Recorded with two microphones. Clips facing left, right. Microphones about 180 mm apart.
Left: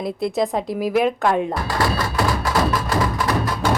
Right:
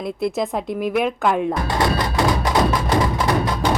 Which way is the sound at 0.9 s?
Centre (ahead or behind).